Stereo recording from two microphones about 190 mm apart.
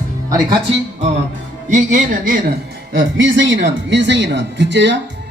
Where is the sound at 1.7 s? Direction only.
40° right (ahead or behind).